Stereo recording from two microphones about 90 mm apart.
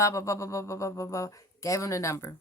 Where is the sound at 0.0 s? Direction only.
35° left (ahead or behind).